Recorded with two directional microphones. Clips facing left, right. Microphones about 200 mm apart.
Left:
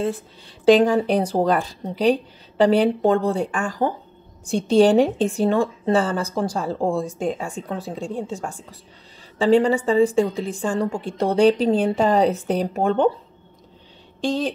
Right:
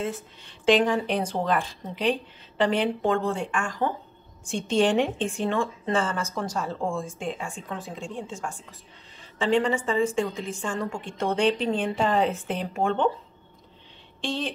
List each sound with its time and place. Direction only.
0.0 s a woman's voice: 35° left (ahead or behind)
14.2 s a woman's voice: 40° left (ahead or behind)